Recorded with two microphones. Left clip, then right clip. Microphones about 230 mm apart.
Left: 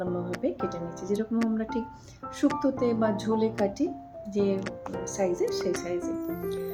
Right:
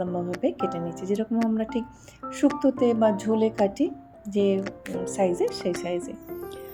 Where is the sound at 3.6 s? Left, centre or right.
Centre.